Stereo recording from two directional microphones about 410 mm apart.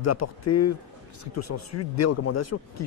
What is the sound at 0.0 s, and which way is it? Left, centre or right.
Speech, left.